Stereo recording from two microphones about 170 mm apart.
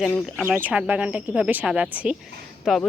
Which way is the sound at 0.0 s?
Centre (ahead or behind).